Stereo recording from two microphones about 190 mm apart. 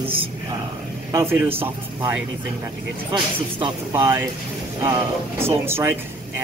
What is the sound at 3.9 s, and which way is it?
Speech, 10° right (ahead or behind).